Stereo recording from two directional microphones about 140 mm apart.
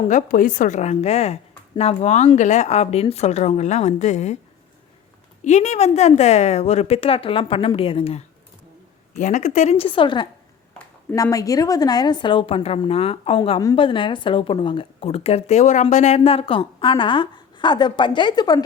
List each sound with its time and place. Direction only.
0.1 s a woman's voice: 75° left (ahead or behind); by 4.4 s 55° left (ahead or behind)
5.4 s a woman's voice: 55° left (ahead or behind)
9.1 s a woman's voice: 60° left (ahead or behind); by 10.2 s 35° left (ahead or behind)
11.1 s a woman's voice: 25° left (ahead or behind)